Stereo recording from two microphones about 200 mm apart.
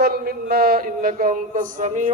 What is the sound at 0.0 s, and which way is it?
A man's voice, 50° right (ahead or behind).